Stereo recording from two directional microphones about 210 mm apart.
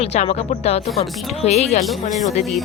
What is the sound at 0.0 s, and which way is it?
A woman's voice, 30° left (ahead or behind).